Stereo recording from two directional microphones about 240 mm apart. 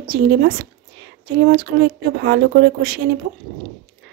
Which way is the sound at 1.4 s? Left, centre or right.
Right.